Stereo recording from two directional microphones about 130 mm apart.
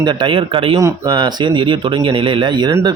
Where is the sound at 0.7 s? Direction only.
30° right (ahead or behind).